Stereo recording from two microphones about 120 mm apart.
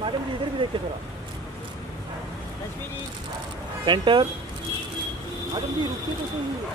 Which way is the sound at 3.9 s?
40° right (ahead or behind).